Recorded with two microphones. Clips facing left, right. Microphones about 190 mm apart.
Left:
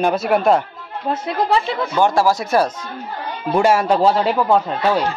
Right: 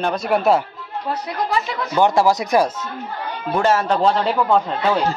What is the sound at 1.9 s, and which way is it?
Speech, 20° right (ahead or behind).